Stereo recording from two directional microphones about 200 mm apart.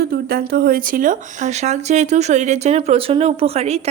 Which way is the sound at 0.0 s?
50° right (ahead or behind).